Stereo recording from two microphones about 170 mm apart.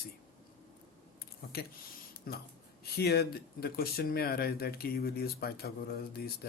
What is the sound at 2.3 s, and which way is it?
Speech, 60° left (ahead or behind).